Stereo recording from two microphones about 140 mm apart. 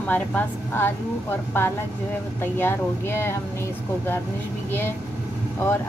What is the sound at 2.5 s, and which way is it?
Speech, 15° left (ahead or behind).